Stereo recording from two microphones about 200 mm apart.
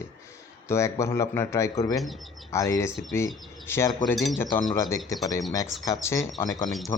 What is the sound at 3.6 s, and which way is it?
Speech, 15° left (ahead or behind).